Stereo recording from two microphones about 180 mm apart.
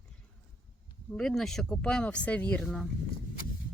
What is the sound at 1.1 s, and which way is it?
Speech, 5° left (ahead or behind).